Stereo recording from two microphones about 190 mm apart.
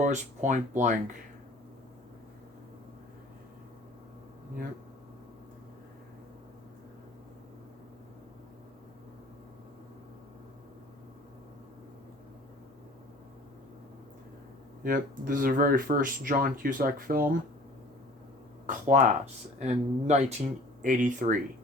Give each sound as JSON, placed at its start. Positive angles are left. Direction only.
{"t": 0.0, "sound": "speech", "side_deg": -40}
{"t": 14.8, "sound": "speech", "side_deg": -45}
{"t": 18.6, "sound": "speech", "side_deg": -45}